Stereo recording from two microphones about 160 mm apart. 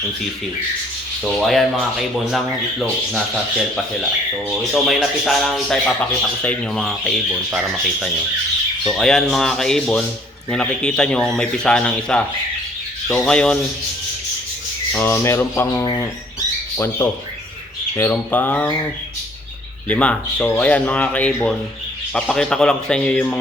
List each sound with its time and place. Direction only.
1.2 s speech: 5° left (ahead or behind)
4.4 s speech: centre (ahead or behind)
14.9 s speech: 15° left (ahead or behind)
15.8 s speech: 25° left (ahead or behind)
16.7 s speech: 15° left (ahead or behind)
19.9 s speech: 10° left (ahead or behind)